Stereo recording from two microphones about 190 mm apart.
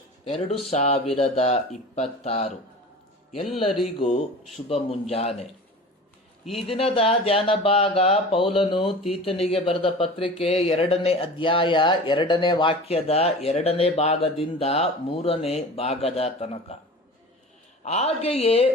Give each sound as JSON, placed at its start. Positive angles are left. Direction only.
{"t": 0.3, "sound": "speech", "side_deg": 30}
{"t": 4.7, "sound": "speech", "side_deg": 30}
{"t": 6.7, "sound": "speech", "side_deg": 30}
{"t": 17.8, "sound": "speech", "side_deg": 35}